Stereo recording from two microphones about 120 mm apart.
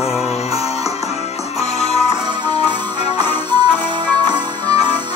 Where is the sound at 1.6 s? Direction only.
60° left (ahead or behind).